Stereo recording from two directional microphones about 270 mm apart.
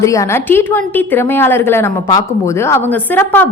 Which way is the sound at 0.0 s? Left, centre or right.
Centre.